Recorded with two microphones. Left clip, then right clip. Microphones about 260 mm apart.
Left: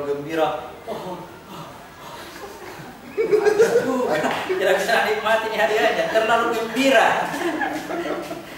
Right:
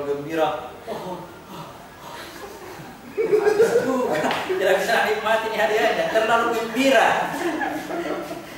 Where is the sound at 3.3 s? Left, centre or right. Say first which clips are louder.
Left 1 dB; centre.